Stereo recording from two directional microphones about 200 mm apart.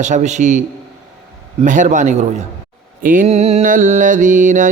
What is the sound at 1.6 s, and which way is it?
Mantra, 40° right (ahead or behind).